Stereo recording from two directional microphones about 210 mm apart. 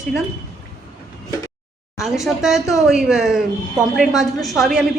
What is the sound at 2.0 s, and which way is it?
A woman's voice, centre (ahead or behind).